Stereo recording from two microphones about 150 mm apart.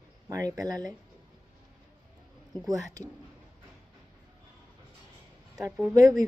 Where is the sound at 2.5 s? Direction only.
20° right (ahead or behind).